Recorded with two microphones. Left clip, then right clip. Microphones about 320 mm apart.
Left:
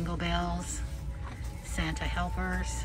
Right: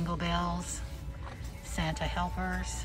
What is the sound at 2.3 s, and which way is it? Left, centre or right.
Speech, right.